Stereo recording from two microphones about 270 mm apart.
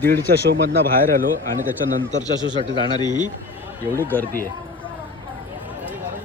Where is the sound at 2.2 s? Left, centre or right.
Centre.